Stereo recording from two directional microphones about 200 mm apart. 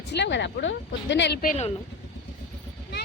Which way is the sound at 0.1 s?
60° left (ahead or behind).